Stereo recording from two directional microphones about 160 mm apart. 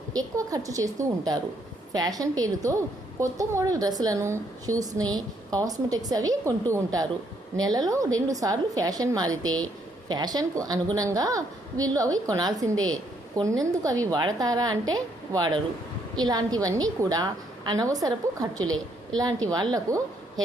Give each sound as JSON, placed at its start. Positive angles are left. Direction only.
{"t": 0.1, "sound": "a woman's voice", "side_deg": -20}
{"t": 19.9, "sound": "a woman's voice", "side_deg": -20}